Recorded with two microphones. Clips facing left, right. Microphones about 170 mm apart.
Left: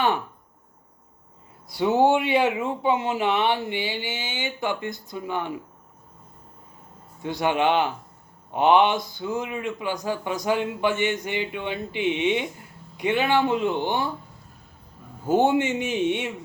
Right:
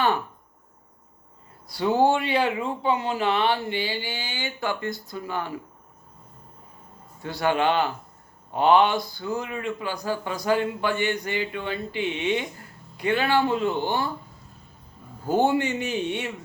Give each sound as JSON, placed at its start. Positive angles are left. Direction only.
{"t": 1.6, "sound": "speech", "side_deg": 20}
{"t": 7.2, "sound": "speech", "side_deg": 20}
{"t": 15.3, "sound": "speech", "side_deg": 20}